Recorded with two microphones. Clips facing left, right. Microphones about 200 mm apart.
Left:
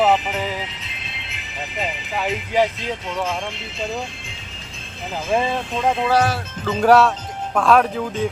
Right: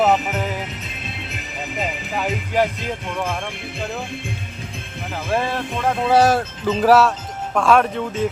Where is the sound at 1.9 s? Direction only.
45° right (ahead or behind).